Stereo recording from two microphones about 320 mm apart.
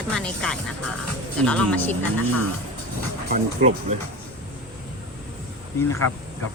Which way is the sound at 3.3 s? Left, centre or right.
Right.